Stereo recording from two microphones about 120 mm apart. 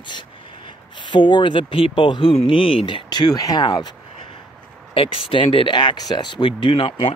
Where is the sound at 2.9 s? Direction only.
35° left (ahead or behind).